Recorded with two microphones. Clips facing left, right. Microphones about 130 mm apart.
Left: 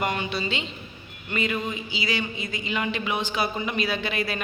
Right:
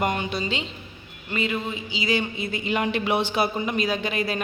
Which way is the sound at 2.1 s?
55° right (ahead or behind).